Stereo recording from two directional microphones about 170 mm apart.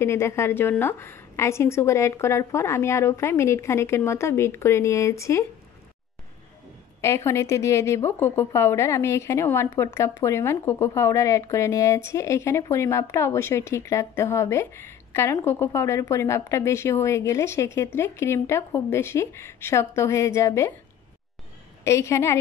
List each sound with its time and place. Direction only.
0.0 s speech: 15° left (ahead or behind)
7.0 s speech: 15° left (ahead or behind)
21.8 s speech: 15° left (ahead or behind)